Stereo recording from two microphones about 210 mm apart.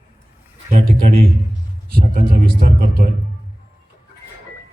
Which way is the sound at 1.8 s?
40° right (ahead or behind).